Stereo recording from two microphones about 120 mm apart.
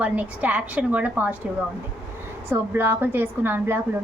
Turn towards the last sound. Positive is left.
turn(degrees=-15)  # may be behind; listen again after turning